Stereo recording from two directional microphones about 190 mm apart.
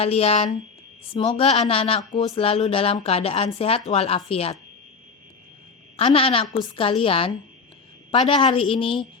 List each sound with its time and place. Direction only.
0.0 s a woman's voice: 30° left (ahead or behind)
6.0 s a woman's voice: 30° left (ahead or behind)